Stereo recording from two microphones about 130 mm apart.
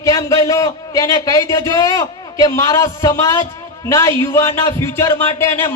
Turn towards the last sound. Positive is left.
turn(degrees=20)  # may be behind; listen again after turning